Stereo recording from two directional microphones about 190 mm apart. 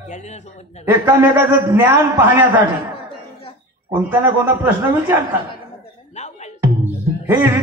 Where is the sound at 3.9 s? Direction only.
10° right (ahead or behind).